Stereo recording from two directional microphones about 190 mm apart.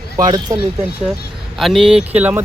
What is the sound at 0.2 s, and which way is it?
Speech, 20° right (ahead or behind).